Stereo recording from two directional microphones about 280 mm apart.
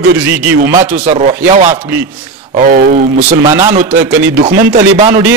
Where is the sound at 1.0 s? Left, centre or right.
Right.